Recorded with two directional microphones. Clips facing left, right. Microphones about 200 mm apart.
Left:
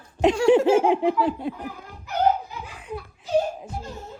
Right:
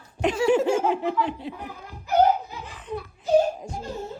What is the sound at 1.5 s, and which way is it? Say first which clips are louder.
Speech: left 5 dB; 50° left (ahead or behind).